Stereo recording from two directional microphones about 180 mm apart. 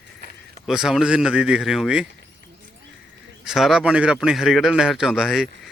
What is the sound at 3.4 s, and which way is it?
A man's voice, centre (ahead or behind).